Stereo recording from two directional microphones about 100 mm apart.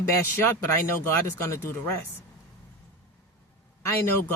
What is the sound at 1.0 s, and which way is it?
Speech, 30° left (ahead or behind).